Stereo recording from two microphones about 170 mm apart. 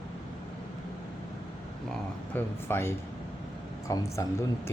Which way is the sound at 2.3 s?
15° left (ahead or behind).